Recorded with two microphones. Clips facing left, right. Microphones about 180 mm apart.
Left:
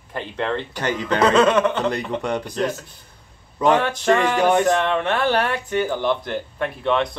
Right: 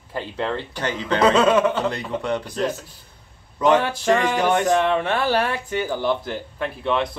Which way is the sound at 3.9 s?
10° right (ahead or behind).